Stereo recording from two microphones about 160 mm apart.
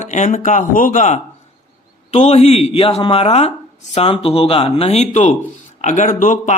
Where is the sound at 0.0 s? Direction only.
50° left (ahead or behind).